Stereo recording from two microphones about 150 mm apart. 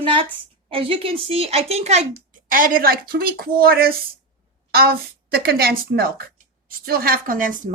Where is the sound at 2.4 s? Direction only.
70° right (ahead or behind).